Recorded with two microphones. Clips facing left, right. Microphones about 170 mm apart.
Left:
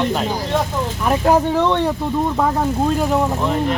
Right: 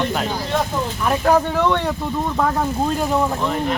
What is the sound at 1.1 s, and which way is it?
Speech, 20° left (ahead or behind).